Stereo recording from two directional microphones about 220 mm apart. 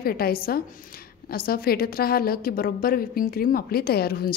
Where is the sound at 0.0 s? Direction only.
45° left (ahead or behind).